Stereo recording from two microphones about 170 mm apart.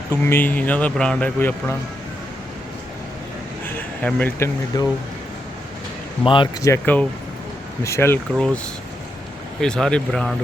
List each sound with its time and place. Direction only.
0.1 s speech: 10° left (ahead or behind)
3.7 s a sound: 10° left (ahead or behind)
4.7 s speech: 25° left (ahead or behind)
6.2 s speech: 30° left (ahead or behind)
6.7 s speech: 10° left (ahead or behind)
9.6 s speech: 5° left (ahead or behind)